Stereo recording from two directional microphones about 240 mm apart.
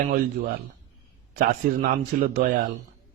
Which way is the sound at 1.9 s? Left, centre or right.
Right.